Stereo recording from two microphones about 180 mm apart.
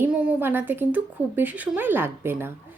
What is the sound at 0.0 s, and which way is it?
A woman's voice, 5° right (ahead or behind).